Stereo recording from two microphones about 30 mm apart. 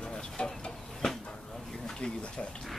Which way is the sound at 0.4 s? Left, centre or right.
Left.